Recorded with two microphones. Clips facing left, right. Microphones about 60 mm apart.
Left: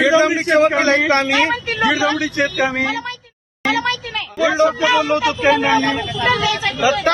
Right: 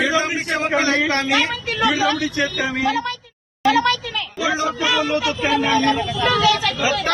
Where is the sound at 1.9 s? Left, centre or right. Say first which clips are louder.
Left 2 dB; left.